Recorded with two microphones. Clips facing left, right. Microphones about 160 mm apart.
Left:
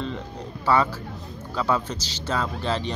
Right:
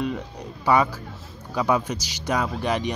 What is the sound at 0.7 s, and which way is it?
Speech, 15° right (ahead or behind).